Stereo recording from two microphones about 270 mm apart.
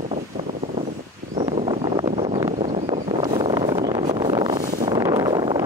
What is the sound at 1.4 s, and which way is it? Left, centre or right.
Vehicle, centre.